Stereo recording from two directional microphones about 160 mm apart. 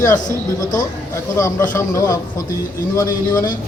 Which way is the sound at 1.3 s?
20° left (ahead or behind).